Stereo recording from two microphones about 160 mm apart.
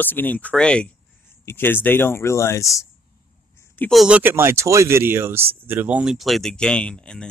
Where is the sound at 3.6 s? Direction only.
10° left (ahead or behind).